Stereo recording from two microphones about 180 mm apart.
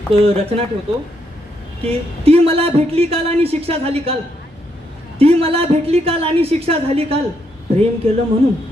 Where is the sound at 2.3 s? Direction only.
35° right (ahead or behind).